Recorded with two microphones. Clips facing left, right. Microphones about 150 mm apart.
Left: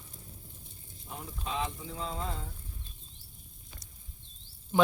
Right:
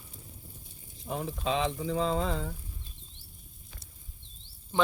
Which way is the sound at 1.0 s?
90° right.